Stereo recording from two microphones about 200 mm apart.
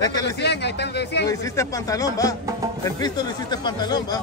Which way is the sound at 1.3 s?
15° left (ahead or behind).